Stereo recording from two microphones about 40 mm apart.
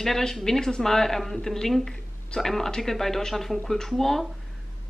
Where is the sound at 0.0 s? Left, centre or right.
Centre.